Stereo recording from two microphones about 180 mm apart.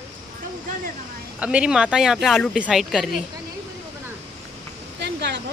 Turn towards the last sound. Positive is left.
turn(degrees=-70)  # may be behind; listen again after turning